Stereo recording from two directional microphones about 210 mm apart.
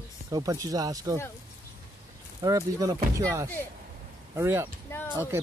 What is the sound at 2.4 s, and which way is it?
Speech, 15° right (ahead or behind).